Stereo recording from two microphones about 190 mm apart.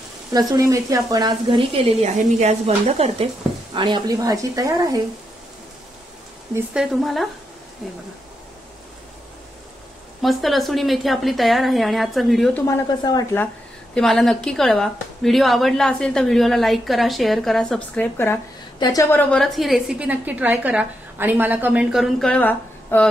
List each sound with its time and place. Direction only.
0.3 s speech: 20° right (ahead or behind)
6.5 s a woman's voice: 5° right (ahead or behind)
10.2 s a woman's voice: centre (ahead or behind)
12.6 s speech: 20° left (ahead or behind)
13.9 s a woman's voice: centre (ahead or behind); by 19.2 s 20° left (ahead or behind)
19.3 s a woman's voice: centre (ahead or behind)